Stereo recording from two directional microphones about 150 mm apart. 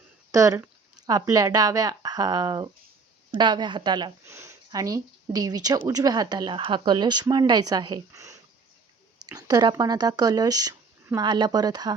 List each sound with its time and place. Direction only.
0.3 s speech: 20° right (ahead or behind)